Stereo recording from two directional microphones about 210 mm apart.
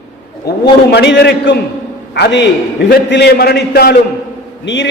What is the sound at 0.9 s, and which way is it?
A man's voice, 55° left (ahead or behind).